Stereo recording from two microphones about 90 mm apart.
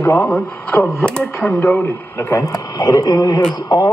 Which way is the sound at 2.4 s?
45° left (ahead or behind).